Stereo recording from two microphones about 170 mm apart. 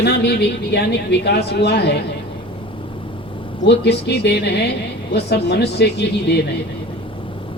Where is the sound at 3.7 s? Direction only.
75° left (ahead or behind).